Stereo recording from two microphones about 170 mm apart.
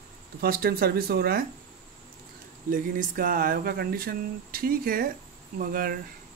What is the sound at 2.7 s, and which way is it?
Speech, 55° right (ahead or behind).